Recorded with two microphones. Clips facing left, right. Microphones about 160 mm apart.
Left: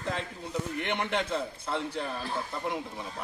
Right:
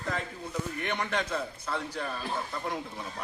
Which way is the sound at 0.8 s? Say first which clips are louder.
Left 1 dB; 20° left (ahead or behind).